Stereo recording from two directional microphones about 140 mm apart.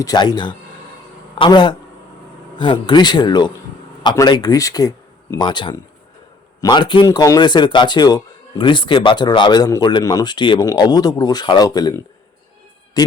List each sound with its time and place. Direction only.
0.0 s speech: 30° left (ahead or behind)
13.0 s speech: 25° left (ahead or behind)